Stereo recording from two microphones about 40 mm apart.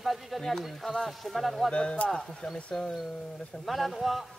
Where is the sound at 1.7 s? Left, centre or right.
Left.